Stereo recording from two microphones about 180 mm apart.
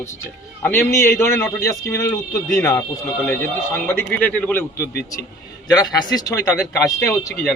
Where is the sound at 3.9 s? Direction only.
10° left (ahead or behind).